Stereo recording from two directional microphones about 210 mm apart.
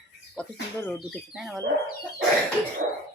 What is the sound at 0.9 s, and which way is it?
Speech, centre (ahead or behind).